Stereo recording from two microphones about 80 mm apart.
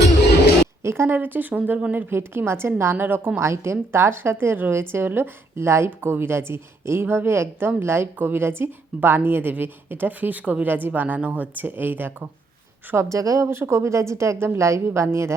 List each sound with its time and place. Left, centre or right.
0.8 s a woman's voice: right
2.1 s a woman's voice: right
12.9 s a woman's voice: right